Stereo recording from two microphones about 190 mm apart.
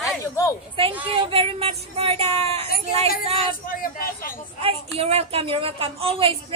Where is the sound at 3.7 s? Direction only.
50° left (ahead or behind).